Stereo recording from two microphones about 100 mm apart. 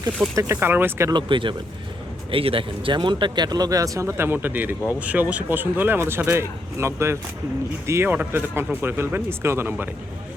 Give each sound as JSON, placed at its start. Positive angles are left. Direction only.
{"t": 0.3, "sound": "speech", "side_deg": -25}
{"t": 1.1, "sound": "speech", "side_deg": -55}